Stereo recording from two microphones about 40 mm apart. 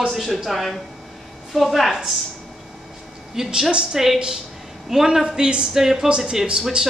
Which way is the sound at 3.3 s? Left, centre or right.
Centre.